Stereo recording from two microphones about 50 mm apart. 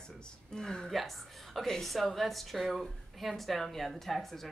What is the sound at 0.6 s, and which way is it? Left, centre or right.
Speech, centre.